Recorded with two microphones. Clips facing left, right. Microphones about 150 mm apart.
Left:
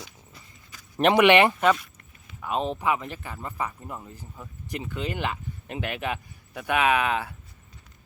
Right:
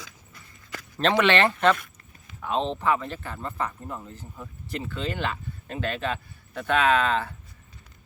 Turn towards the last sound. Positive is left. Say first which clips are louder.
# right 1 dB
turn(degrees=10)  # may be behind; listen again after turning